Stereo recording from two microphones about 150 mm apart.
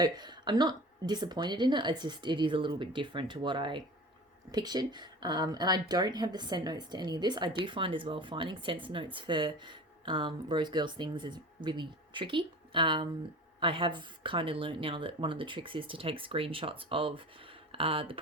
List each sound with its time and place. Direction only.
0.0 s speech: 30° right (ahead or behind)